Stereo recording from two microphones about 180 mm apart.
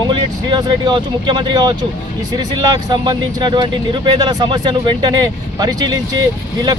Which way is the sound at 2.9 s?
25° right (ahead or behind).